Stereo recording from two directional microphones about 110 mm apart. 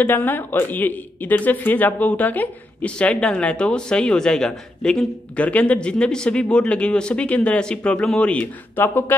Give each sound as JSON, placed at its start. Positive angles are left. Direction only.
{"t": 0.0, "sound": "speech", "side_deg": 15}